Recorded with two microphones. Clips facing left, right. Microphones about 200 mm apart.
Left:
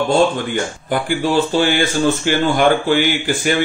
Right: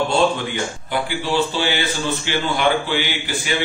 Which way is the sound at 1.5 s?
50° left (ahead or behind).